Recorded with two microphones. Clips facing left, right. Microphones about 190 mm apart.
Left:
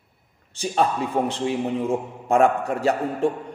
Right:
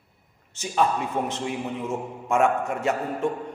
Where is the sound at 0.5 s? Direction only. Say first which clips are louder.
Left 1 dB; 35° left (ahead or behind).